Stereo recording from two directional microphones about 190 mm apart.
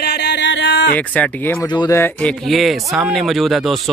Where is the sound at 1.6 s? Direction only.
20° left (ahead or behind).